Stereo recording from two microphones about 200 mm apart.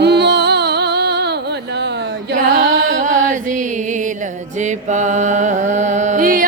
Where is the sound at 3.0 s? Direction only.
40° right (ahead or behind).